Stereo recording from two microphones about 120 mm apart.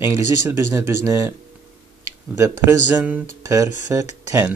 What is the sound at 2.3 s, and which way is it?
Speech, 20° right (ahead or behind).